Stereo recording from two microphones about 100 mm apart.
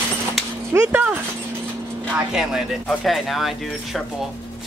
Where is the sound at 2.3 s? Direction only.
5° right (ahead or behind).